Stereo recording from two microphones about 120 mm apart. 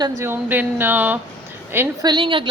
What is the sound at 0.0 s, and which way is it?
Speech, 30° right (ahead or behind).